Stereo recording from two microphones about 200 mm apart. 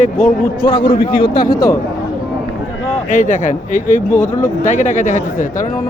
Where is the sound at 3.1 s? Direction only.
40° left (ahead or behind).